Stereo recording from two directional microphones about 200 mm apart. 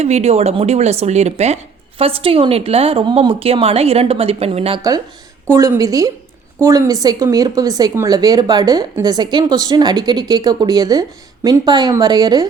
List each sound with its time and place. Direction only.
0.0 s speech: 30° right (ahead or behind)
4.8 s a woman's voice: 20° right (ahead or behind)